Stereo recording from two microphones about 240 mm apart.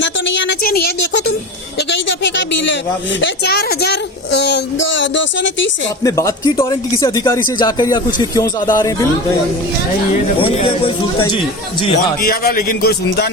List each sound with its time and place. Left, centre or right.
0.0 s a sound: left
3.2 s a woman's voice: left
6.0 s speech: centre
10.3 s speech: left
12.2 s a man's voice: left